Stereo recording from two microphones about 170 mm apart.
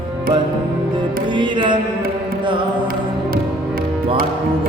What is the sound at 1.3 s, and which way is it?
Music, 30° right (ahead or behind).